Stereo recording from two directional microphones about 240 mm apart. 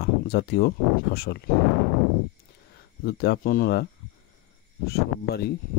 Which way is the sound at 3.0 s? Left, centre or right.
Left.